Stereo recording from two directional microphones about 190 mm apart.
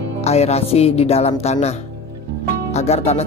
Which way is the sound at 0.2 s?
35° left (ahead or behind).